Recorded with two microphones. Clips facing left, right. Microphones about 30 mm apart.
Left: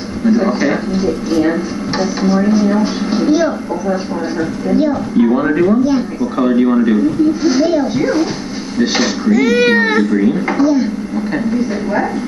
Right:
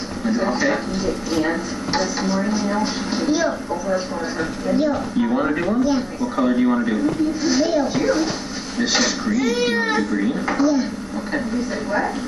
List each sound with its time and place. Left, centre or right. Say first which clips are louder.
0.3 s speech: left 6 dB; centre
9.3 s speech: left 11 dB; left
10.1 s speech: left 7 dB; centre